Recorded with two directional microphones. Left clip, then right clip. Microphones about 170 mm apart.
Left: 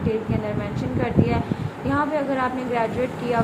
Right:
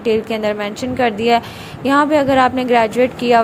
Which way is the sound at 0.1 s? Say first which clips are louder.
Right 10 dB; 45° right (ahead or behind).